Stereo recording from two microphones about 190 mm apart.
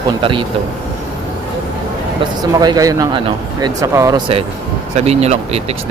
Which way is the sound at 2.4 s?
20° right (ahead or behind).